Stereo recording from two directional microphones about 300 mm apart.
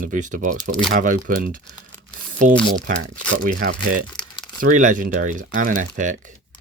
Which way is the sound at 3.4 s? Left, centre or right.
Right.